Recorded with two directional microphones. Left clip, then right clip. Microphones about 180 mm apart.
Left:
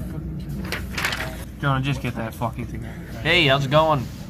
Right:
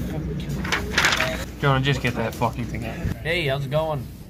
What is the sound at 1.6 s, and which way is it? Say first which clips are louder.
Speech: right 3 dB; centre (ahead or behind).